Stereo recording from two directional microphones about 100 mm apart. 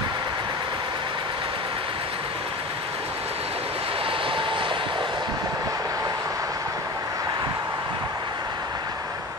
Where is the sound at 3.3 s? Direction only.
85° right; by 8.9 s 40° right (ahead or behind).